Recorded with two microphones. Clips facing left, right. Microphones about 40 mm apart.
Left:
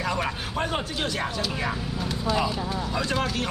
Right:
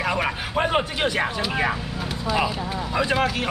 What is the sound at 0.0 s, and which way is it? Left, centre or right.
A man's voice, right.